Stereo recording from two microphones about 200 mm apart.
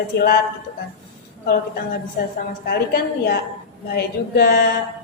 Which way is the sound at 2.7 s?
50° left (ahead or behind).